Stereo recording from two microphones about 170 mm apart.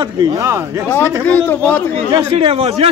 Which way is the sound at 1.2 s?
10° left (ahead or behind).